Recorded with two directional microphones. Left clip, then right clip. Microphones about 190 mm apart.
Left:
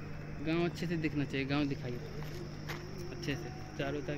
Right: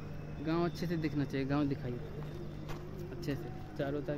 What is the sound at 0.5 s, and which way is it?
Speech, 30° right (ahead or behind).